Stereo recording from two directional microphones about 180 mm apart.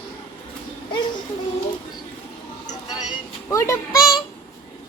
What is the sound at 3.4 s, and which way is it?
Speech, 15° left (ahead or behind).